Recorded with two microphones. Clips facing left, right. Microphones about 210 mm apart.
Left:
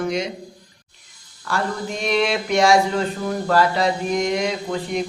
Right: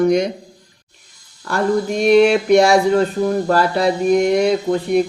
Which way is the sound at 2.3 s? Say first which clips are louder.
Right 5 dB; 55° right (ahead or behind).